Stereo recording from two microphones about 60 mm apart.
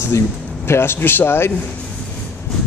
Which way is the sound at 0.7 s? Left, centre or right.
Left.